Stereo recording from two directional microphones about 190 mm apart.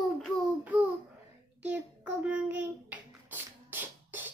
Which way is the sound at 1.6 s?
5° right (ahead or behind).